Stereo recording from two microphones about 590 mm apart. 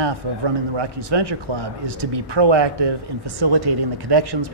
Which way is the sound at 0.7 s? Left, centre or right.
Right.